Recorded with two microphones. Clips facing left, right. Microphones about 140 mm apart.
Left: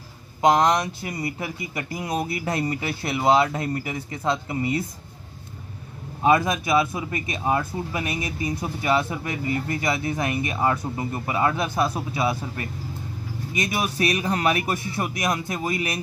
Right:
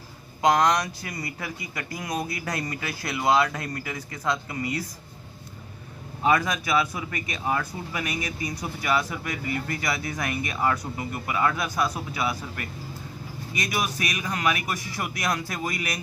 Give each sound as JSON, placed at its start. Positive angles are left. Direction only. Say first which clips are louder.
{"t": 0.4, "sound": "speech", "louder": "left 2 dB", "side_deg": 25}
{"t": 6.2, "sound": "speech", "louder": "left 3 dB", "side_deg": 25}